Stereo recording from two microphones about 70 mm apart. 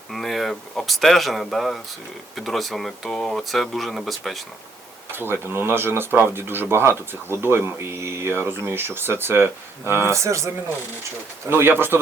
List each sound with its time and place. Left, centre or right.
0.1 s speech: centre
5.1 s speech: right
11.4 s speech: right